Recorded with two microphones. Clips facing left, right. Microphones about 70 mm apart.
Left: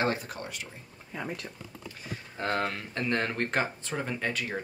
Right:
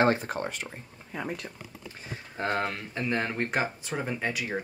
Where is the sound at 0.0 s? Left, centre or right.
Right.